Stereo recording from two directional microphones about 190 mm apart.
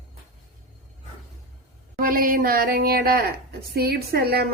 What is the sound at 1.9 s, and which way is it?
A woman's voice, 45° right (ahead or behind).